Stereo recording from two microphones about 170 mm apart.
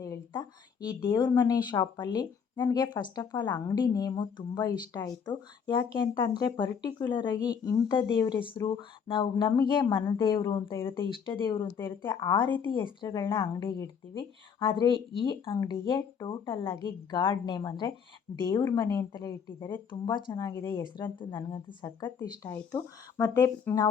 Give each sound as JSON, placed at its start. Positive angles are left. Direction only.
{"t": 0.0, "sound": "a sound", "side_deg": 20}
{"t": 0.9, "sound": "speech", "side_deg": 25}
{"t": 19.9, "sound": "speech", "side_deg": 25}